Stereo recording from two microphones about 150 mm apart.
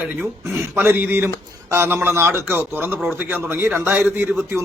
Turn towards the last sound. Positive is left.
turn(degrees=-15)  # may be behind; listen again after turning